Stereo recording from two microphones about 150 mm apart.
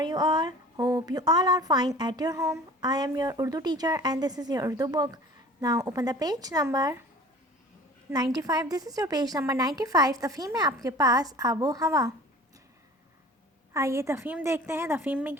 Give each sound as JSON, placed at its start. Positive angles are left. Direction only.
{"t": 0.0, "sound": "speech", "side_deg": -30}
{"t": 8.1, "sound": "speech", "side_deg": -25}
{"t": 13.7, "sound": "a woman's voice", "side_deg": -20}